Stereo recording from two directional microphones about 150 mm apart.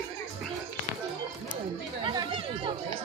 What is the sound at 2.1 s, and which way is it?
Speech, 30° right (ahead or behind).